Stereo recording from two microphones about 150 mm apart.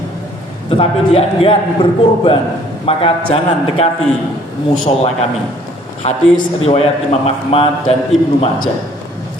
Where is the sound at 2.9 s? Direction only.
40° left (ahead or behind).